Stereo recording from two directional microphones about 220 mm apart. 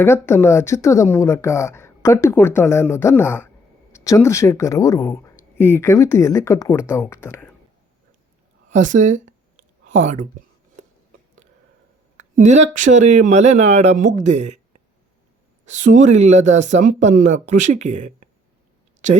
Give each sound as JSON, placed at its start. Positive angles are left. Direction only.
{"t": 0.0, "sound": "a woman's voice", "side_deg": 10}
{"t": 8.7, "sound": "speech", "side_deg": -35}
{"t": 12.4, "sound": "speech", "side_deg": -35}
{"t": 15.6, "sound": "speech", "side_deg": -35}